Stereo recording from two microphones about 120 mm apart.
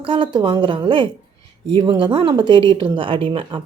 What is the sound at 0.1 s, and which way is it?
Speech, 45° right (ahead or behind).